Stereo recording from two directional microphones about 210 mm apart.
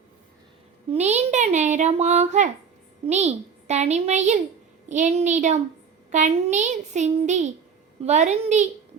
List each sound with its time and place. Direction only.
0.9 s speech: 30° right (ahead or behind)